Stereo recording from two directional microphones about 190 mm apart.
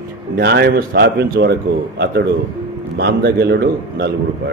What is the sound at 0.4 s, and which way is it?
A man's voice, 60° right (ahead or behind).